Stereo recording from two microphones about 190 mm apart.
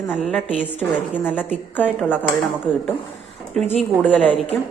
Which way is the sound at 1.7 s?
10° left (ahead or behind).